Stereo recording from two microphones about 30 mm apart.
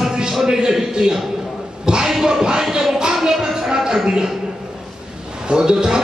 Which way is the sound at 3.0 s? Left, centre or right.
Right.